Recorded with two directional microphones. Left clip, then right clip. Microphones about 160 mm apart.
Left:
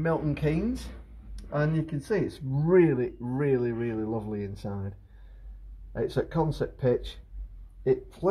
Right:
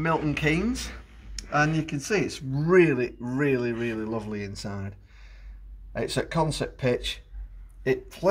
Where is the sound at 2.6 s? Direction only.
50° left (ahead or behind).